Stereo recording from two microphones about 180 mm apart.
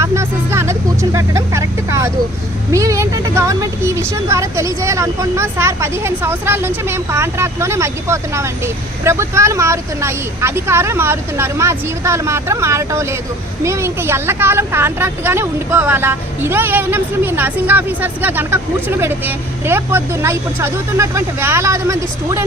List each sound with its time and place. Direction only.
0.0 s a woman's voice: 15° right (ahead or behind)